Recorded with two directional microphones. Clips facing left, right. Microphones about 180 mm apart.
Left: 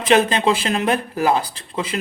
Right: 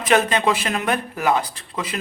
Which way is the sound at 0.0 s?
30° left (ahead or behind).